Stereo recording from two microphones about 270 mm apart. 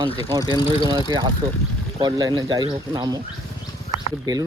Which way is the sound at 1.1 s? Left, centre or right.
Centre.